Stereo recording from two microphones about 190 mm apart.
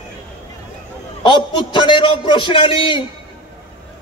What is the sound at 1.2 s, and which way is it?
A man's voice, 25° left (ahead or behind).